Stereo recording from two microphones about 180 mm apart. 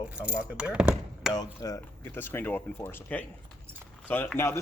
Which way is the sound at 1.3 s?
20° left (ahead or behind).